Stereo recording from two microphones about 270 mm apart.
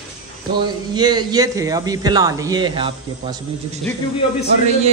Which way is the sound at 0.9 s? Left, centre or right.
Centre.